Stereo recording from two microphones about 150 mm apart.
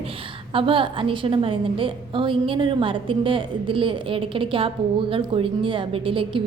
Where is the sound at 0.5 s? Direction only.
35° right (ahead or behind).